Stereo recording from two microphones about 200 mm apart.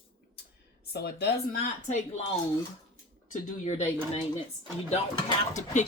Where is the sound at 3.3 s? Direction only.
35° left (ahead or behind).